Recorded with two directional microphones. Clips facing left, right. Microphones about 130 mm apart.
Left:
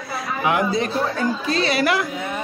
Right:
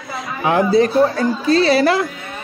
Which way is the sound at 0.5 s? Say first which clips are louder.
Right 7 dB; 30° right (ahead or behind).